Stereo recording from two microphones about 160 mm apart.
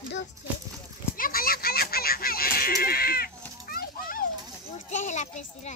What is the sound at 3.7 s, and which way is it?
Children playing, 65° left (ahead or behind).